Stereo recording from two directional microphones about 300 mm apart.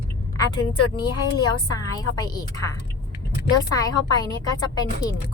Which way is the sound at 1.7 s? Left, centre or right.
Centre.